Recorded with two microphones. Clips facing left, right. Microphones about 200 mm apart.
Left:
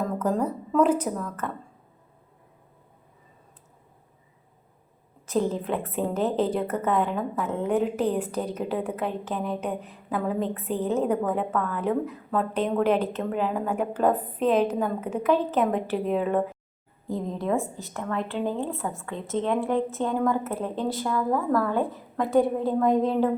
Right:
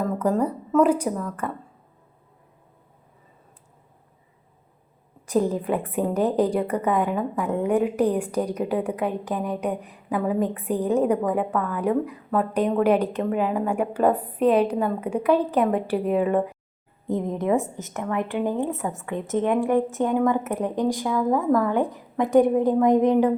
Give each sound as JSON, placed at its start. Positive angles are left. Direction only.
{"t": 0.0, "sound": "a woman's voice", "side_deg": -5}
{"t": 5.3, "sound": "a woman's voice", "side_deg": -10}
{"t": 17.1, "sound": "a woman's voice", "side_deg": -20}